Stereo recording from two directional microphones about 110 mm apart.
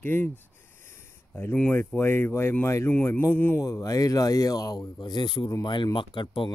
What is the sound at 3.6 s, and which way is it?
Speech, 30° left (ahead or behind).